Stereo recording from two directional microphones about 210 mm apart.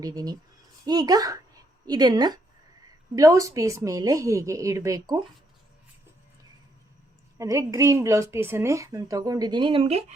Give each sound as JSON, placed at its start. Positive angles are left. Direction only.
{"t": 0.0, "sound": "a woman's voice", "side_deg": -20}
{"t": 7.3, "sound": "a woman's voice", "side_deg": -15}